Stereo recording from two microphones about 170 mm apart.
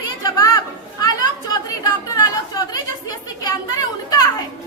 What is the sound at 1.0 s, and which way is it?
Chatter, 20° left (ahead or behind).